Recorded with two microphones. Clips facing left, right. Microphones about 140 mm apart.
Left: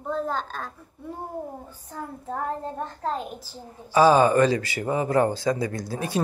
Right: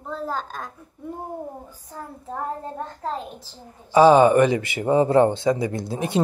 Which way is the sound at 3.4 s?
20° right (ahead or behind).